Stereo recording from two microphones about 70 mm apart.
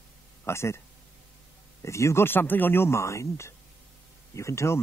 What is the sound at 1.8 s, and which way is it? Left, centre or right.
Speech, left.